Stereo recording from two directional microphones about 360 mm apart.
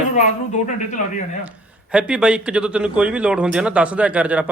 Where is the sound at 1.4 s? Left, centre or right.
Centre.